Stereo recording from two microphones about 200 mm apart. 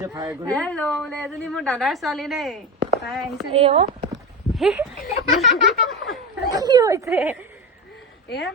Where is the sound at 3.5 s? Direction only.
30° right (ahead or behind).